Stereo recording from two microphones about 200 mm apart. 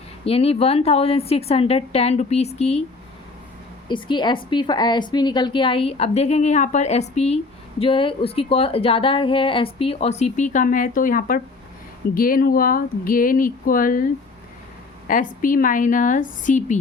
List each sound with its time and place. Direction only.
0.3 s a woman's voice: 30° left (ahead or behind)
3.8 s a woman's voice: 25° left (ahead or behind); by 16.8 s 40° left (ahead or behind)